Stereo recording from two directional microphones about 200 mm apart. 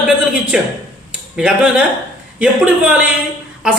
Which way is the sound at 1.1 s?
5° right (ahead or behind).